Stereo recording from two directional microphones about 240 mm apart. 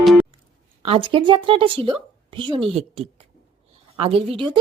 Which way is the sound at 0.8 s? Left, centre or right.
Right.